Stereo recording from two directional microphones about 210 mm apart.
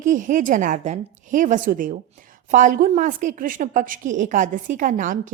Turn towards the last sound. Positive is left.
turn(degrees=-40)  # may be behind; listen again after turning